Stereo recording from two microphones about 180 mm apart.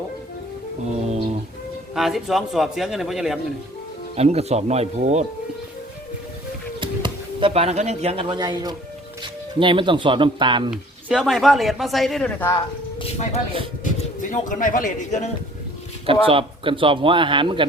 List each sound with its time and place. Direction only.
1.0 s a sound: 40° right (ahead or behind)
2.0 s speech: centre (ahead or behind)
4.1 s speech: 35° right (ahead or behind)
6.7 s speech: 25° right (ahead or behind)
10.7 s speech: centre (ahead or behind)
12.5 s speech: 25° left (ahead or behind)
14.2 s a man's voice: 45° left (ahead or behind)
16.2 s speech: 30° right (ahead or behind)